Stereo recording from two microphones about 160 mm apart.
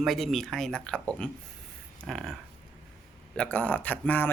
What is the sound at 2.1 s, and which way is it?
Speech, centre (ahead or behind).